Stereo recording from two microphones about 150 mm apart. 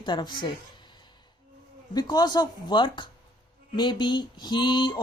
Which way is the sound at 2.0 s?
25° left (ahead or behind).